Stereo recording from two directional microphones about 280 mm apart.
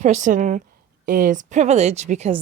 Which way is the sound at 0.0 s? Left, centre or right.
Right.